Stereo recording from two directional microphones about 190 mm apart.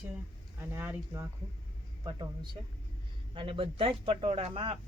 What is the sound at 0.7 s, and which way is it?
Speech, 10° right (ahead or behind).